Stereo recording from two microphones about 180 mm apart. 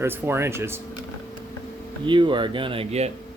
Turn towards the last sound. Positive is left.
turn(degrees=-35)  # may be behind; listen again after turning